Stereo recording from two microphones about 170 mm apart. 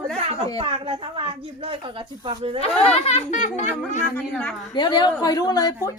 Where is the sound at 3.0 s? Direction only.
45° left (ahead or behind).